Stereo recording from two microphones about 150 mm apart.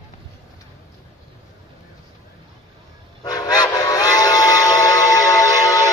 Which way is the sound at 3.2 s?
25° left (ahead or behind).